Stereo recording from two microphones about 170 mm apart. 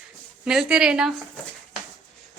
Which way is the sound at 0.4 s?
5° right (ahead or behind).